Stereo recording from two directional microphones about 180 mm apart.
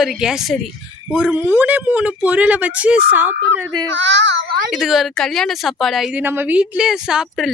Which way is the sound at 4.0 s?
90° right.